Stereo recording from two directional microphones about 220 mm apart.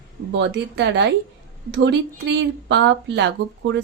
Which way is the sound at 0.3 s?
55° right (ahead or behind).